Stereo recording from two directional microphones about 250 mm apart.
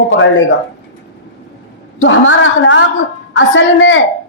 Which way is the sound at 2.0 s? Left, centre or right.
Left.